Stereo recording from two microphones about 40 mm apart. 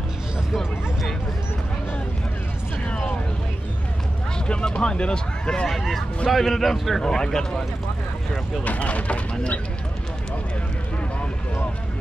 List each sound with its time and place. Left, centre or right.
4.5 s speech: left
5.7 s speech: centre
7.2 s speech: centre
8.6 s speech: left